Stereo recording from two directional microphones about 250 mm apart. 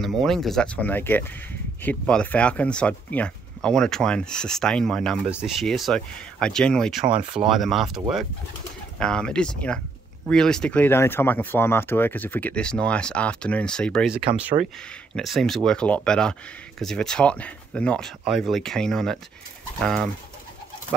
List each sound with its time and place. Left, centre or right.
0.0 s speech: centre
9.0 s speech: centre